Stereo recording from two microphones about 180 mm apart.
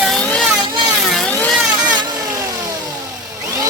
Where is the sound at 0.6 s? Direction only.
20° right (ahead or behind).